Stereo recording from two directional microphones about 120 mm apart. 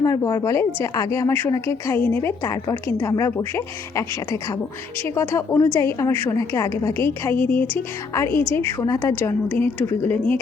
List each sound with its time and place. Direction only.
0.0 s a woman's voice: 30° left (ahead or behind)
1.3 s a woman's voice: 15° left (ahead or behind)